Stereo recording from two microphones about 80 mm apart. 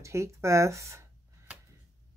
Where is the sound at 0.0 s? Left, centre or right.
Right.